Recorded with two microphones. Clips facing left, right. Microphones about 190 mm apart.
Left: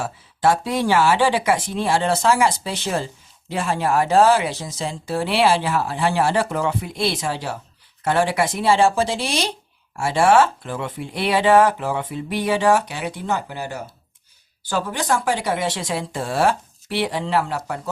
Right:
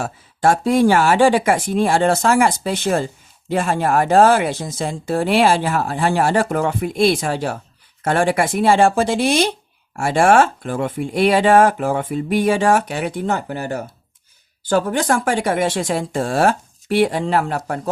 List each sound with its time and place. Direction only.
0.0 s speech: 45° right (ahead or behind)